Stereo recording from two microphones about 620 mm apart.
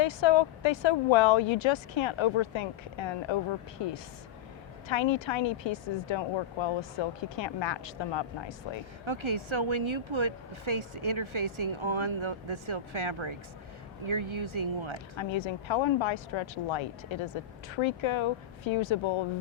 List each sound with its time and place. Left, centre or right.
0.0 s speech: left
9.0 s speech: right
15.1 s speech: left